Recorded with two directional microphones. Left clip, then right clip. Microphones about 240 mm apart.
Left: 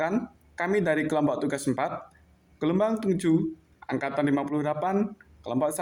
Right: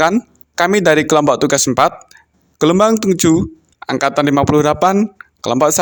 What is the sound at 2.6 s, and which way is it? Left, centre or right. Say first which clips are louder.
Speech: right 14 dB; right.